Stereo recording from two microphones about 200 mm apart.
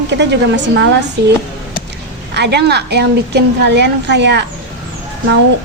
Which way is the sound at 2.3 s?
55° right (ahead or behind).